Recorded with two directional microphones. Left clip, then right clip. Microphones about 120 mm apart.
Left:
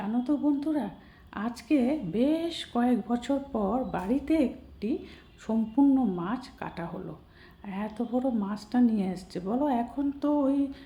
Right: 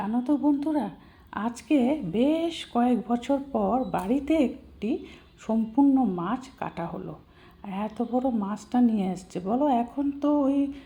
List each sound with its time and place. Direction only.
0.0 s a woman's voice: 25° right (ahead or behind)